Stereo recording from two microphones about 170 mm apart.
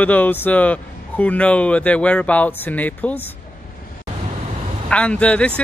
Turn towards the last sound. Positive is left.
turn(degrees=5)  # may be behind; listen again after turning